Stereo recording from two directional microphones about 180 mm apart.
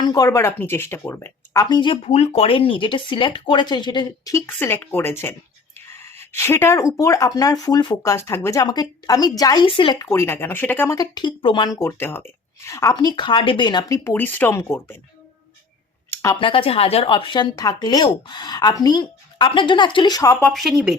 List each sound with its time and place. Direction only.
0.0 s speech: 20° left (ahead or behind)
1.7 s speech: 25° left (ahead or behind)
2.0 s speech: 35° left (ahead or behind); by 14.9 s 15° left (ahead or behind)
16.3 s speech: 30° left (ahead or behind)
20.3 s speech: 5° left (ahead or behind)